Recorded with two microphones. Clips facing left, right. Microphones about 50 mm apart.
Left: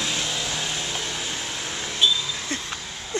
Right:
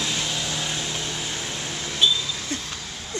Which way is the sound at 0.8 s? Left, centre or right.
Centre.